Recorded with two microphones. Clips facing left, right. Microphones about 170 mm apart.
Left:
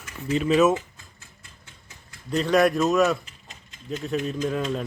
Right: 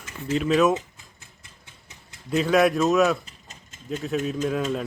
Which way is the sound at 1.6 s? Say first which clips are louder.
Even; 20° right (ahead or behind).